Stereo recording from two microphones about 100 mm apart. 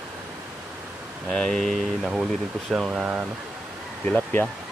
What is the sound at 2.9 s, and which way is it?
Speech, 15° right (ahead or behind).